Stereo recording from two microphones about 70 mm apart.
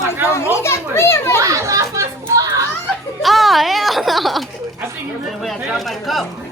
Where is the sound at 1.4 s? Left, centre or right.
Right.